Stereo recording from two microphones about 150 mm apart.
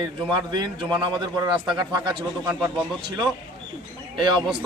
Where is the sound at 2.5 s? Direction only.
5° right (ahead or behind).